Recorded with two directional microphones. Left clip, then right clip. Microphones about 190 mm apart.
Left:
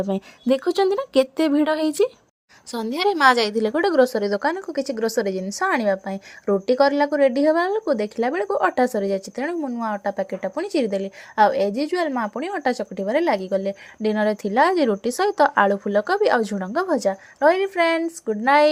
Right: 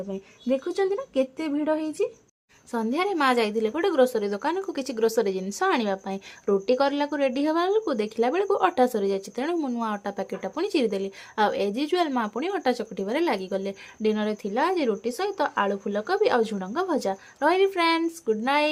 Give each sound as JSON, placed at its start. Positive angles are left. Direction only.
{"t": 0.1, "sound": "speech", "side_deg": 50}